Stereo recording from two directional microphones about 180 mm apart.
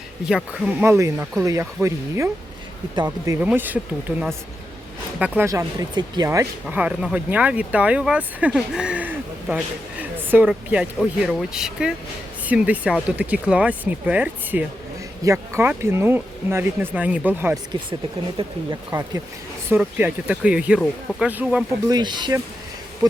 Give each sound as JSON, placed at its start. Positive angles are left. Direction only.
{"t": 0.3, "sound": "speech", "side_deg": -5}
{"t": 3.3, "sound": "speech", "side_deg": -10}
{"t": 5.2, "sound": "speech", "side_deg": -10}
{"t": 18.4, "sound": "speech", "side_deg": -30}
{"t": 18.9, "sound": "speech", "side_deg": -20}
{"t": 21.8, "sound": "speech", "side_deg": -25}